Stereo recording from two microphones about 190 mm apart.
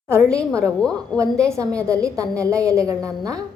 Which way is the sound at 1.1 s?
15° right (ahead or behind).